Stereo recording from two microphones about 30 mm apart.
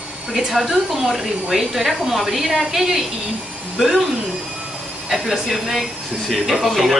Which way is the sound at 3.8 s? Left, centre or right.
Right.